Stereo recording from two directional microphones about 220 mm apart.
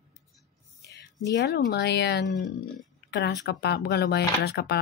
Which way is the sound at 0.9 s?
50° left (ahead or behind).